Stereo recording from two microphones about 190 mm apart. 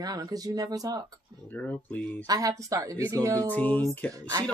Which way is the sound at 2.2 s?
20° right (ahead or behind).